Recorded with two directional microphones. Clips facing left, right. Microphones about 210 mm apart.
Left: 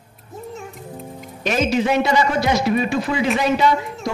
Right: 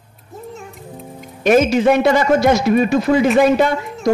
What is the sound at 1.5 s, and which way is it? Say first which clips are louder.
A man's voice: right 7 dB; 50° right (ahead or behind).